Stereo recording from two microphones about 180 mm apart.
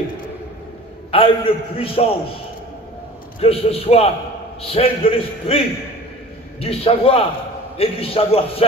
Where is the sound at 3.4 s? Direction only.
35° left (ahead or behind).